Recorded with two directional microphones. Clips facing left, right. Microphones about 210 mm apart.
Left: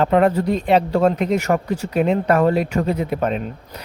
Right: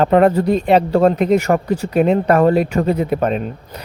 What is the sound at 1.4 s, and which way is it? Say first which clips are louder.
Speech: right 3 dB; 35° right (ahead or behind).